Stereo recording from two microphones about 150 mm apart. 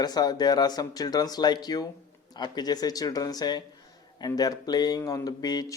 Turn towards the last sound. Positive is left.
turn(degrees=25)  # may be behind; listen again after turning